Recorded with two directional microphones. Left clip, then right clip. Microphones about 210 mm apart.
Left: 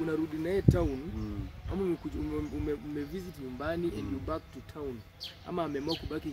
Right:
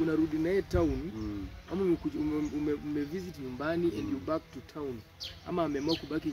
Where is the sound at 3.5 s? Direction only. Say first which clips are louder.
Right 3 dB; 15° right (ahead or behind).